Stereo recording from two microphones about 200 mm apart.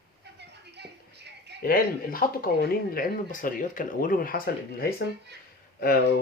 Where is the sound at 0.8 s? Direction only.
55° right (ahead or behind).